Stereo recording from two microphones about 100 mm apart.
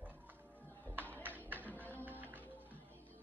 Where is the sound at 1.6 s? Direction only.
15° left (ahead or behind).